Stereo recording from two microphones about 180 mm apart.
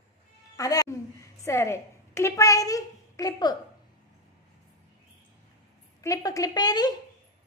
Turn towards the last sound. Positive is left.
turn(degrees=20)  # may be behind; listen again after turning